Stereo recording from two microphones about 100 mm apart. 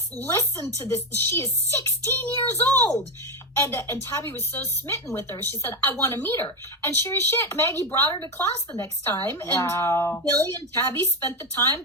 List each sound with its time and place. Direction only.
0.3 s speech: 25° left (ahead or behind)